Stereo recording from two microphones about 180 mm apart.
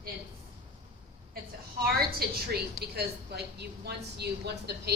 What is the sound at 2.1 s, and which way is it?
A woman's voice, 60° right (ahead or behind).